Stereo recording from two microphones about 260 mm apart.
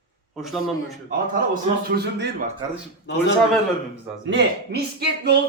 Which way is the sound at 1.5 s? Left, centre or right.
Right.